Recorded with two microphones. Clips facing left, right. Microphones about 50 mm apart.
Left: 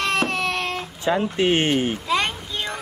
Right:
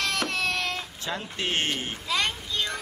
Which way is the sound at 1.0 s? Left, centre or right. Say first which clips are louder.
Left 14 dB; left.